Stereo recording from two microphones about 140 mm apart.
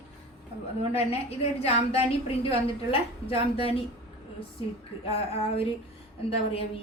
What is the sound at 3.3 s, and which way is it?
Speech, 45° left (ahead or behind).